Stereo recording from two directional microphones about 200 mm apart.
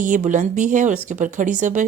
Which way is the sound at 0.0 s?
40° right (ahead or behind).